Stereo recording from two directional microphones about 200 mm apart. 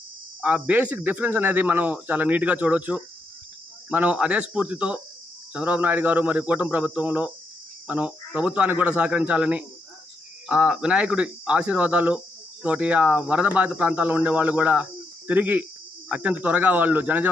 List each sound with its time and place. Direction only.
0.4 s speech: 5° right (ahead or behind)